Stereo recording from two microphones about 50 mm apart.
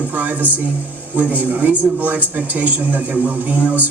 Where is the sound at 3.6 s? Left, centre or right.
Right.